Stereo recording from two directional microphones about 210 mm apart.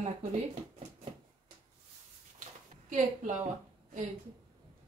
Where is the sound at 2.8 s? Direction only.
35° right (ahead or behind).